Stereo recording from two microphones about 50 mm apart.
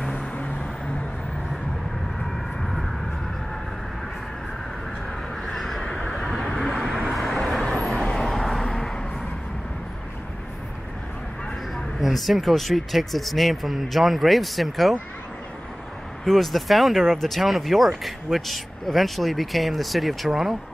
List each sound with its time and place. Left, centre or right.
0.1 s vehicle: left
2.2 s vehicle: centre
5.4 s crow: centre
5.9 s vehicle: left
6.1 s vehicle: centre
7.1 s vehicle: centre
7.9 s vehicle: centre
11.7 s speech: centre
16.3 s speech: centre